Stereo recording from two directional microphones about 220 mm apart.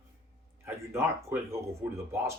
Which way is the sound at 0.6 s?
10° right (ahead or behind).